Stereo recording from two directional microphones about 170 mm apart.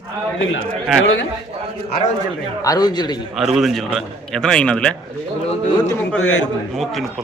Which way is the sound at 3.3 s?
Centre (ahead or behind).